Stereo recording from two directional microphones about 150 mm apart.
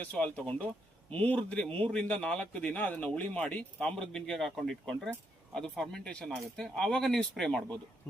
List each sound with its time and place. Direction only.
0.0 s a man's voice: 10° left (ahead or behind)